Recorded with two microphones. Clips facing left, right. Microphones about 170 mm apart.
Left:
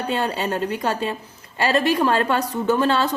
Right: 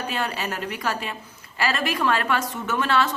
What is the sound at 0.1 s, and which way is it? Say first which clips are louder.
A woman's voice: left 8 dB; 30° left (ahead or behind).